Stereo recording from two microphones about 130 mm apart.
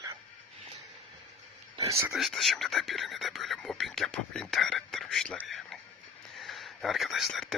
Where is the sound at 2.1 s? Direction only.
Centre (ahead or behind).